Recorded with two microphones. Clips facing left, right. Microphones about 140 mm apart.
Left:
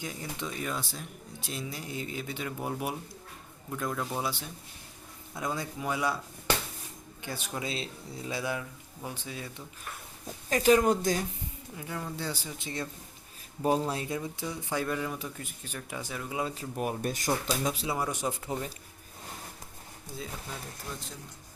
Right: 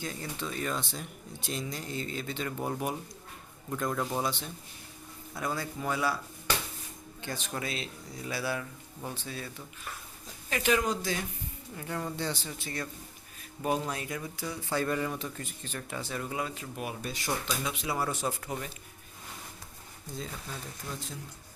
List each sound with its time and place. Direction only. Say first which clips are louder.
0.0 s a man's voice: even; 15° left (ahead or behind); by 4.3 s 5° right (ahead or behind)
5.3 s a man's voice: even; 20° left (ahead or behind)
7.2 s speech: even; 10° left (ahead or behind)
7.6 s a man's voice: left 1 dB; 25° left (ahead or behind)
10.5 s speech: left 6 dB; 40° left (ahead or behind)
11.8 s speech: right 2 dB; centre (ahead or behind); by 12.9 s 20° left (ahead or behind)
13.6 s a man's voice: left 3 dB; 30° left (ahead or behind); by 14.8 s 15° left (ahead or behind)
14.8 s speech: right 1 dB; centre (ahead or behind)
16.4 s speech: left 3 dB; 40° left (ahead or behind)
17.8 s speech: even; 15° left (ahead or behind)